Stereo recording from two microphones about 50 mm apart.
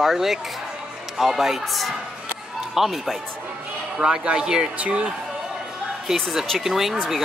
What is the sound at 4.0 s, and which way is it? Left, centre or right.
Speech, centre.